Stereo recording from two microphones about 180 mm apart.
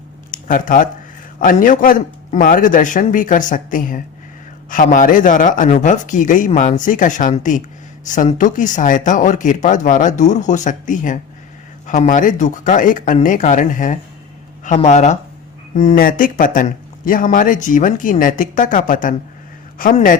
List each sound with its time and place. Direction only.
0.3 s speech: 50° left (ahead or behind)